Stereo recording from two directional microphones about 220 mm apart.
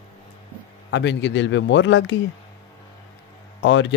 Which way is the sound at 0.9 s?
55° left (ahead or behind).